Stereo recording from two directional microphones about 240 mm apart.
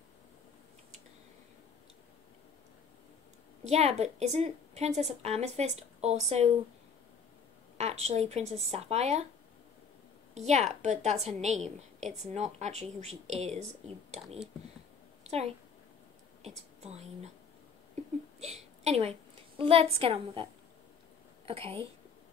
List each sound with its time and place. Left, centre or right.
3.6 s a woman's voice: right
7.7 s a woman's voice: right
10.3 s a woman's voice: right
15.2 s a woman's voice: right
18.4 s a sound: right
19.6 s a woman's voice: right
21.5 s a woman's voice: right